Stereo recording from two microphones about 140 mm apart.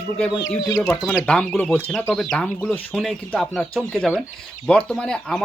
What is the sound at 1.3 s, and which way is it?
Speech, 10° left (ahead or behind).